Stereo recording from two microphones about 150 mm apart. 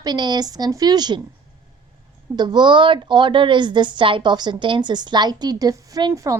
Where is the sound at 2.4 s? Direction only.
30° right (ahead or behind).